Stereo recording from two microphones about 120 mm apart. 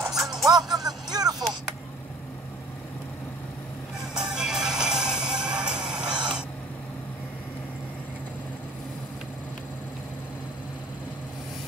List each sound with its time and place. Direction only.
0.1 s music: centre (ahead or behind)
0.7 s music: 35° right (ahead or behind)
4.1 s music: 5° right (ahead or behind)